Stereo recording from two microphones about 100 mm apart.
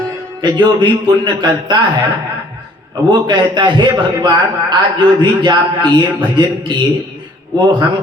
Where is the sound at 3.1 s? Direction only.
50° right (ahead or behind).